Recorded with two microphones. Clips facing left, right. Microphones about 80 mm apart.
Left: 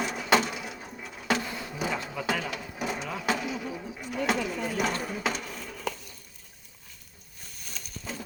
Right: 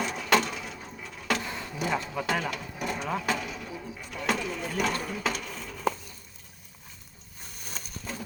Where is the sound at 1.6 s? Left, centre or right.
Centre.